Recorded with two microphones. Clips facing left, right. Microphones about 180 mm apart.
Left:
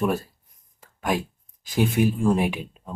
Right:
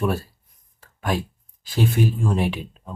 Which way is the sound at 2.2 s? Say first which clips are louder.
Left 2 dB; 10° left (ahead or behind).